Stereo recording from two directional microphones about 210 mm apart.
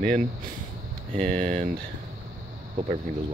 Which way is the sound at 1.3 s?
30° right (ahead or behind).